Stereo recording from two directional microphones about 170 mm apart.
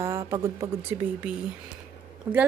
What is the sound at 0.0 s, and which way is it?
A woman's voice, 15° right (ahead or behind).